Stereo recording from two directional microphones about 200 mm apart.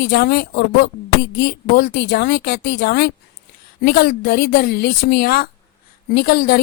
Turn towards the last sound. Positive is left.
turn(degrees=50)  # may be behind; listen again after turning